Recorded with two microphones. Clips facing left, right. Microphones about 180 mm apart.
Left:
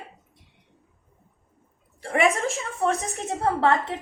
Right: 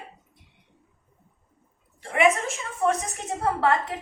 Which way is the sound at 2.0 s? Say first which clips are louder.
Even; 35° left (ahead or behind).